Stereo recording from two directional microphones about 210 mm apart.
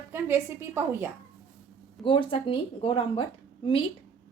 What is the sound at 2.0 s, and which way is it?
Speech, 25° left (ahead or behind).